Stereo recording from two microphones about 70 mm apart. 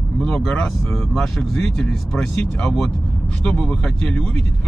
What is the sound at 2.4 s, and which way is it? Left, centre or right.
Speech, centre.